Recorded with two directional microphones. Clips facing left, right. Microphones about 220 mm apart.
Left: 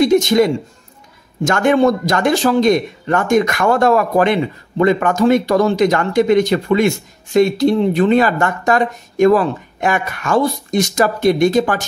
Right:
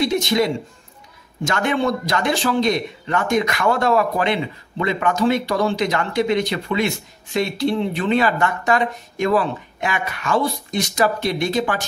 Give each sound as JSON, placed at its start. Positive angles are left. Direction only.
{"t": 0.0, "sound": "speech", "side_deg": 45}